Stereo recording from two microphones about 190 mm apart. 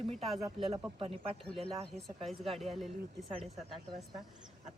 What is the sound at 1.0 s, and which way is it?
Speech, 30° right (ahead or behind).